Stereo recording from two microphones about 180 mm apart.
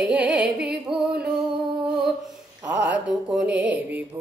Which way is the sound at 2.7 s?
75° right (ahead or behind).